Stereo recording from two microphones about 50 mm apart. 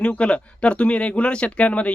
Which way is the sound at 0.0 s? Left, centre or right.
Left.